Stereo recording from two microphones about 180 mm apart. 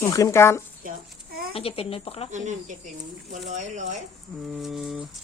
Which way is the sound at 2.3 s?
45° right (ahead or behind).